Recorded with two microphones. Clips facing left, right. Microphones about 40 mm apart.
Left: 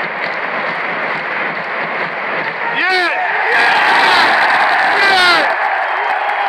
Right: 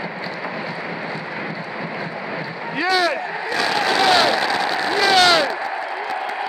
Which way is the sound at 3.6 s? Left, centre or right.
Left.